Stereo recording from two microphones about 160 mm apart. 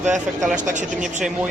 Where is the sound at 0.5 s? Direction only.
50° right (ahead or behind).